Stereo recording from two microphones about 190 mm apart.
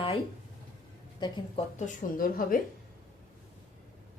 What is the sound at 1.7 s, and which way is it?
Speech, 45° left (ahead or behind).